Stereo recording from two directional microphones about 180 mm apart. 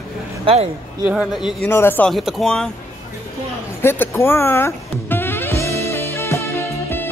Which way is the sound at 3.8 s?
15° left (ahead or behind).